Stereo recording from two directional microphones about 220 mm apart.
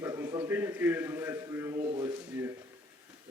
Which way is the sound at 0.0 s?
15° right (ahead or behind).